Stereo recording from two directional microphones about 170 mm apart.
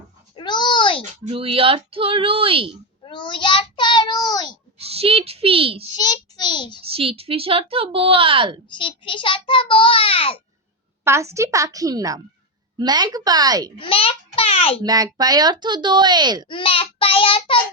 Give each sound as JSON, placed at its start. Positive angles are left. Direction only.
{"t": 0.3, "sound": "a sound", "side_deg": 25}
{"t": 1.2, "sound": "speech", "side_deg": -35}
{"t": 3.0, "sound": "child singing", "side_deg": 30}
{"t": 4.8, "sound": "a child's voice", "side_deg": -35}
{"t": 6.0, "sound": "a child's voice", "side_deg": 25}
{"t": 6.8, "sound": "speech", "side_deg": -35}
{"t": 8.7, "sound": "a child's voice", "side_deg": 30}
{"t": 11.0, "sound": "speech", "side_deg": -15}
{"t": 13.7, "sound": "a child's voice", "side_deg": 30}
{"t": 14.8, "sound": "speech", "side_deg": -20}
{"t": 16.5, "sound": "a child's voice", "side_deg": 30}